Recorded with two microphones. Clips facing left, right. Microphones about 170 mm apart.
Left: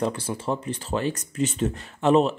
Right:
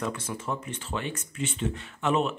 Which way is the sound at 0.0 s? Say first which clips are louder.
Left 6 dB; 30° left (ahead or behind).